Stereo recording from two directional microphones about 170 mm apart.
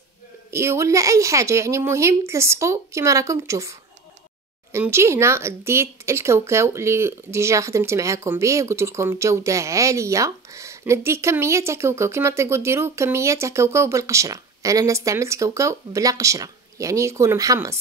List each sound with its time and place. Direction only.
0.5 s speech: 15° right (ahead or behind)
4.7 s speech: 15° right (ahead or behind)